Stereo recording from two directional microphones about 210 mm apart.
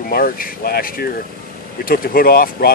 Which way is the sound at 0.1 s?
45° left (ahead or behind).